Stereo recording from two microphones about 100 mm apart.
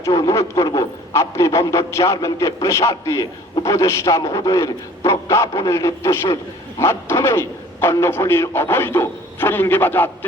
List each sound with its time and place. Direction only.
0.0 s a man's voice: 35° left (ahead or behind)